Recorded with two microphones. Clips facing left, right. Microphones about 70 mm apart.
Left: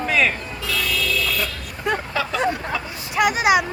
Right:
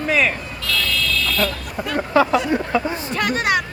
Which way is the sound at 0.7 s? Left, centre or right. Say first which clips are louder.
Right 1 dB; centre.